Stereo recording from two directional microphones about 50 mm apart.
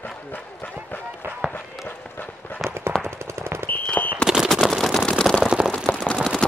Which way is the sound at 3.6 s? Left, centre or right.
Left.